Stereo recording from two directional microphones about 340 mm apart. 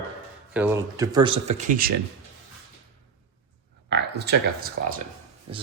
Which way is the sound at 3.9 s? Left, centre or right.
Right.